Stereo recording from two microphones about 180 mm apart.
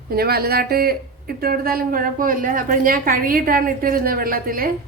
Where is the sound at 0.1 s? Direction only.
60° right (ahead or behind).